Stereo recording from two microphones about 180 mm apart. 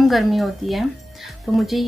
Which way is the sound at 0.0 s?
Centre (ahead or behind).